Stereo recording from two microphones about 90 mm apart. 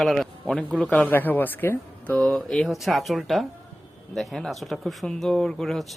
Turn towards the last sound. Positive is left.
turn(degrees=5)  # may be behind; listen again after turning